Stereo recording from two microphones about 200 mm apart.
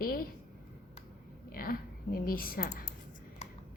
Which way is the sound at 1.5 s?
50° left (ahead or behind).